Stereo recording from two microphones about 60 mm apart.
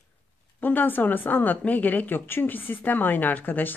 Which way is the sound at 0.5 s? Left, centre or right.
Left.